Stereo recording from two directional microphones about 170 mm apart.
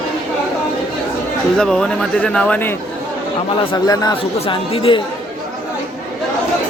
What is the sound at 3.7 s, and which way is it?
Speech, 20° left (ahead or behind).